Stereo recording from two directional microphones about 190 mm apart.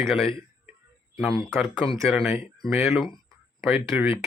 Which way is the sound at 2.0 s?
Centre (ahead or behind).